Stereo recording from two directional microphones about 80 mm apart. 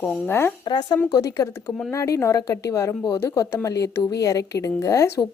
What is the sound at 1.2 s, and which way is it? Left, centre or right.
A woman's voice, left.